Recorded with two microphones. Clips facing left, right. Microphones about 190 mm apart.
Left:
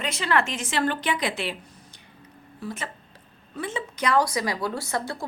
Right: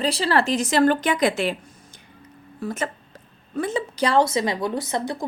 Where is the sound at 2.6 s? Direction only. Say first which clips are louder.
Right 6 dB; 45° right (ahead or behind).